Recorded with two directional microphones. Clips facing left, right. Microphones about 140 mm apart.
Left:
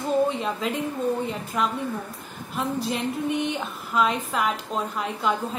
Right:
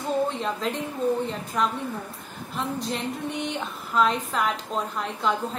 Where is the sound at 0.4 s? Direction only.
5° left (ahead or behind).